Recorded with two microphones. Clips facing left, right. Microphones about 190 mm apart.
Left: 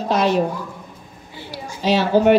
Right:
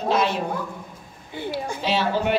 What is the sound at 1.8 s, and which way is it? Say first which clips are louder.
Speech: left 8 dB; 40° left (ahead or behind).